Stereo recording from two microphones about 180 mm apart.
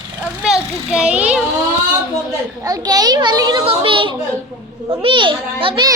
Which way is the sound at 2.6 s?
20° right (ahead or behind).